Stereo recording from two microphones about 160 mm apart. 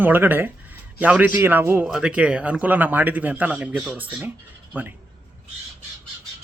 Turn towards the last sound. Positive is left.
turn(degrees=-10)  # may be behind; listen again after turning